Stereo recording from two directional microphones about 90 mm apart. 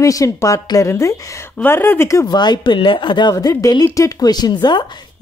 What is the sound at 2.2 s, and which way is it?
Speech, 50° left (ahead or behind).